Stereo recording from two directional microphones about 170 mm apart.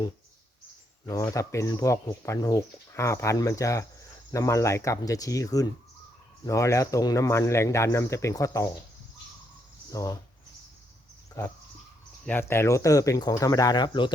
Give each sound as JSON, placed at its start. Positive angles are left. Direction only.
{"t": 1.0, "sound": "speech", "side_deg": 20}
{"t": 9.9, "sound": "speech", "side_deg": 20}
{"t": 11.4, "sound": "speech", "side_deg": 15}